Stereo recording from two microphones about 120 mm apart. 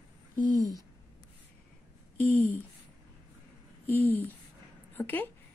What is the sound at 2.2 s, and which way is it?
Speech, 15° left (ahead or behind).